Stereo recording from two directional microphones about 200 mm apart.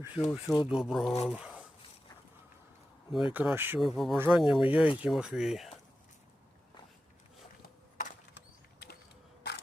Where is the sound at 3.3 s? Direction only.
10° right (ahead or behind).